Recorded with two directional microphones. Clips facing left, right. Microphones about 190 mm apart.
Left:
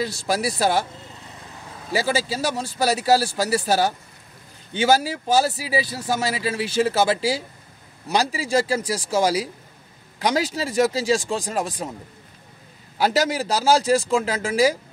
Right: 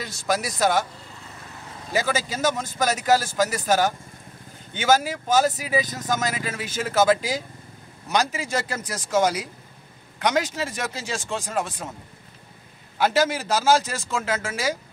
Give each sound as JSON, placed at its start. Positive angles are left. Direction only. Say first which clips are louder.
{"t": 0.0, "sound": "speech", "louder": "left 3 dB", "side_deg": 35}
{"t": 2.0, "sound": "speech", "louder": "left 2 dB", "side_deg": 35}
{"t": 5.9, "sound": "speech", "louder": "left 1 dB", "side_deg": 10}
{"t": 6.3, "sound": "speech", "louder": "left 7 dB", "side_deg": 30}
{"t": 13.0, "sound": "speech", "louder": "left 1 dB", "side_deg": 35}